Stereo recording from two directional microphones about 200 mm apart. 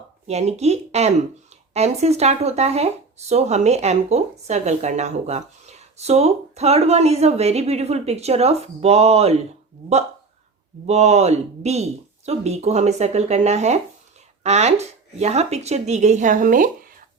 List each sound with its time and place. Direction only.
0.3 s speech: 35° right (ahead or behind)
10.8 s speech: 35° right (ahead or behind)